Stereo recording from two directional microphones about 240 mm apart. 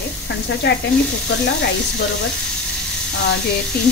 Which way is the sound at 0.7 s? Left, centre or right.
Left.